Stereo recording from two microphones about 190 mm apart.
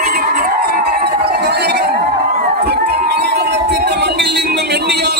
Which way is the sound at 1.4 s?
60° right (ahead or behind).